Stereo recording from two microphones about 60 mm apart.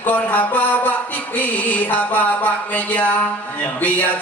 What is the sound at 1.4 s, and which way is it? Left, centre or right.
A man's voice, left.